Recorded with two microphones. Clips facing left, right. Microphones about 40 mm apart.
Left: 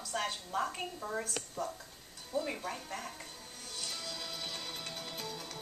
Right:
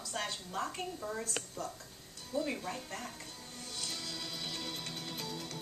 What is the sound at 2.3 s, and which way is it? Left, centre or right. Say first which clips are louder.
Speech: even; centre.